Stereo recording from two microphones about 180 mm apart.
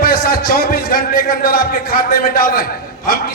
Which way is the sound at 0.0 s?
55° left (ahead or behind).